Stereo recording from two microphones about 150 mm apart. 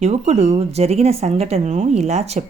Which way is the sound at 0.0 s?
50° right (ahead or behind).